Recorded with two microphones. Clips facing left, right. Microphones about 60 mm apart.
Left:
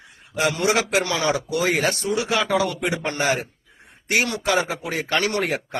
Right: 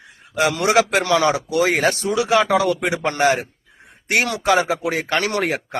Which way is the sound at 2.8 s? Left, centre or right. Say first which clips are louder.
Right 5 dB; right.